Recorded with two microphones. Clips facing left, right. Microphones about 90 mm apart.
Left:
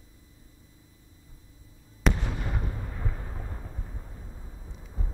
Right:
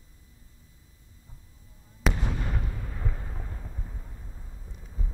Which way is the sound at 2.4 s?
15° left (ahead or behind).